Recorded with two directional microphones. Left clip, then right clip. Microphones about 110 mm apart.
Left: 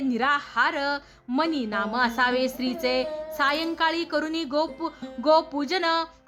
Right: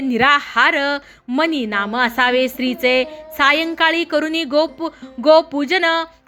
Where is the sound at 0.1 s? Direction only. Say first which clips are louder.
Right 11 dB; 35° right (ahead or behind).